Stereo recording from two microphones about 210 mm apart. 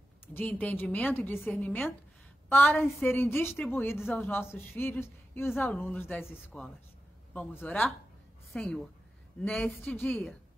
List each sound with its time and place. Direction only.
0.3 s a woman's voice: 10° left (ahead or behind)